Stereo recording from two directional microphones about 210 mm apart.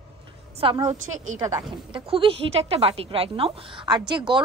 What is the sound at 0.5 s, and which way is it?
A woman's voice, 25° right (ahead or behind).